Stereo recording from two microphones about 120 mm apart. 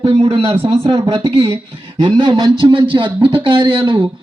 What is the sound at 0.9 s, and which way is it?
A man's voice, 40° right (ahead or behind).